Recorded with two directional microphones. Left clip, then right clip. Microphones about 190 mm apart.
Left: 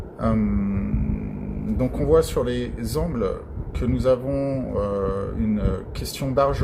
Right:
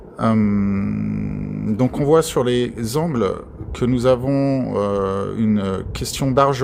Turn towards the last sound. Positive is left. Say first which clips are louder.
# right 5 dB
turn(degrees=-50)  # may be behind; listen again after turning